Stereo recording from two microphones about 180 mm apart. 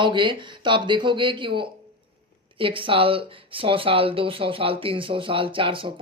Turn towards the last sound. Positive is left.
turn(degrees=-30)  # may be behind; listen again after turning